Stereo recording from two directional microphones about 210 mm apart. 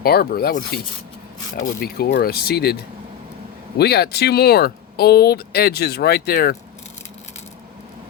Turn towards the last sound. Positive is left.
turn(degrees=45)  # may be behind; listen again after turning